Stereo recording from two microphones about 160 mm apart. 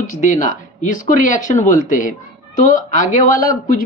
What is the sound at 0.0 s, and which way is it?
Speech, 50° left (ahead or behind).